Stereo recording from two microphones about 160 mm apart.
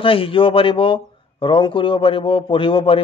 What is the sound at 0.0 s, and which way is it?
Speech, 35° left (ahead or behind).